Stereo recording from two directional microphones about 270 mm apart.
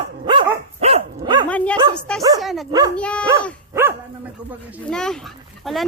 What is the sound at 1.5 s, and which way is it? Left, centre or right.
Bow-wow, centre.